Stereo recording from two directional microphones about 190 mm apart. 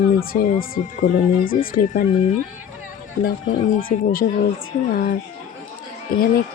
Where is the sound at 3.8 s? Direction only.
50° left (ahead or behind).